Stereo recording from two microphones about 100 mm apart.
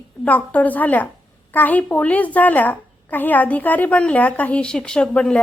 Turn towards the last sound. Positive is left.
turn(degrees=10)  # may be behind; listen again after turning